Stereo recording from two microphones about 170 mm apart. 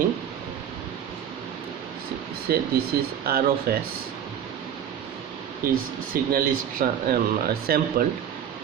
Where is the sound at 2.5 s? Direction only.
65° right (ahead or behind).